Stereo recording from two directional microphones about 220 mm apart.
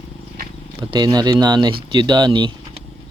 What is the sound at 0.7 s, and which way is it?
Speech, 20° right (ahead or behind).